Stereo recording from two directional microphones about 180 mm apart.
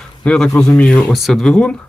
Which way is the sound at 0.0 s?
5° left (ahead or behind).